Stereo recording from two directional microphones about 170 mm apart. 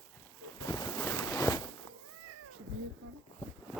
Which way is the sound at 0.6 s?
20° left (ahead or behind).